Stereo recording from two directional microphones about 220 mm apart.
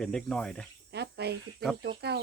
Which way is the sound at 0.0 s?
5° left (ahead or behind).